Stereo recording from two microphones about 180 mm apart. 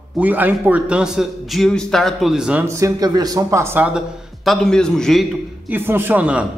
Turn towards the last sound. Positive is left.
turn(degrees=-5)  # may be behind; listen again after turning